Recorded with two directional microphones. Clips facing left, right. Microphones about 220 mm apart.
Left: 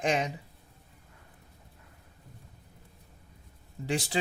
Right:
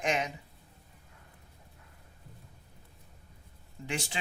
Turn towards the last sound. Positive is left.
turn(degrees=35)  # may be behind; listen again after turning